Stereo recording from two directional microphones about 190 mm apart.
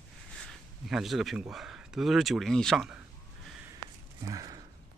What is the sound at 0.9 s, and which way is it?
Speech, centre (ahead or behind).